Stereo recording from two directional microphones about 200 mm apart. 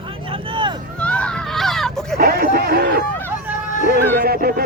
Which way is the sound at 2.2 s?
50° right (ahead or behind).